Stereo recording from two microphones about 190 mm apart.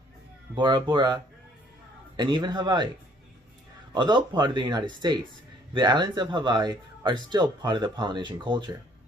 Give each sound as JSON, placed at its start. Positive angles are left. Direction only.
{"t": 0.6, "sound": "speech", "side_deg": -25}
{"t": 3.9, "sound": "speech", "side_deg": -25}